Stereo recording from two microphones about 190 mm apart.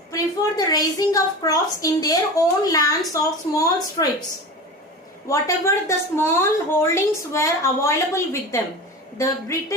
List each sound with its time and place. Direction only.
0.1 s a woman's voice: 20° left (ahead or behind)
5.3 s a woman's voice: 15° left (ahead or behind)